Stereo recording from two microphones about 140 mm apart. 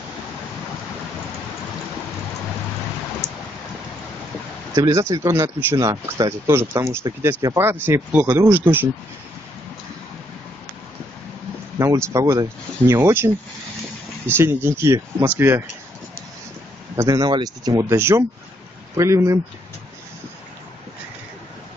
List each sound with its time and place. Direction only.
4.7 s speech: 20° right (ahead or behind)
11.8 s speech: 20° right (ahead or behind)
16.9 s speech: 25° right (ahead or behind)